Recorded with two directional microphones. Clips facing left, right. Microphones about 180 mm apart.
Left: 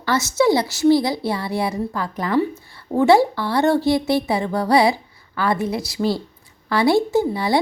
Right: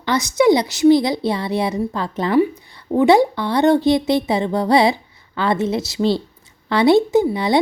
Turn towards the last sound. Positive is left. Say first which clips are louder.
# right 3 dB
turn(degrees=-20)  # may be behind; listen again after turning